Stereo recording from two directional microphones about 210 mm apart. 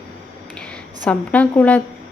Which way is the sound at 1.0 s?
5° left (ahead or behind).